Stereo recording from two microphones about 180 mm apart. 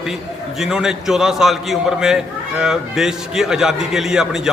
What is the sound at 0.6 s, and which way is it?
A man's voice, centre (ahead or behind).